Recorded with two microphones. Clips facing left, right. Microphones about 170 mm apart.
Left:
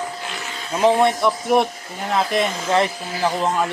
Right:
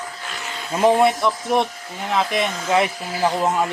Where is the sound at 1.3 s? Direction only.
5° left (ahead or behind).